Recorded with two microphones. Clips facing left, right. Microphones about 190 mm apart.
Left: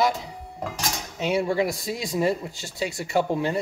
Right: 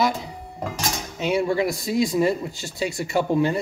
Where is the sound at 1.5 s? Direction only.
35° left (ahead or behind).